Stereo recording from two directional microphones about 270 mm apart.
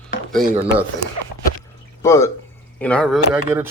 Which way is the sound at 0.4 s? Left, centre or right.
Right.